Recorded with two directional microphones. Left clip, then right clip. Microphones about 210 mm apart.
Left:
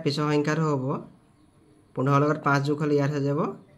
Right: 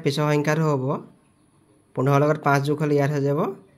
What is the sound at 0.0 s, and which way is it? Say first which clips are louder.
Speech: right 3 dB; 30° right (ahead or behind).